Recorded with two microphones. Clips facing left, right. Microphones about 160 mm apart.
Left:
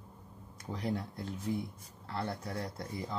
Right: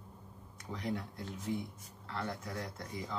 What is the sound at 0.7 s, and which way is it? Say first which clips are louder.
Speech: left 2 dB; 35° left (ahead or behind).